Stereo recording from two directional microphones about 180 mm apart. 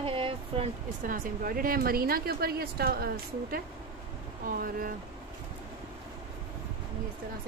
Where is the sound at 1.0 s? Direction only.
50° right (ahead or behind).